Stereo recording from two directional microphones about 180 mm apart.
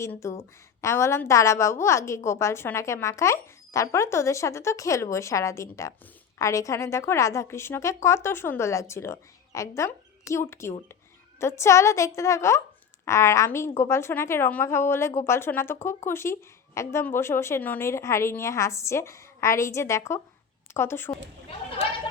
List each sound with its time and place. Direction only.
0.0 s a woman's voice: 15° left (ahead or behind)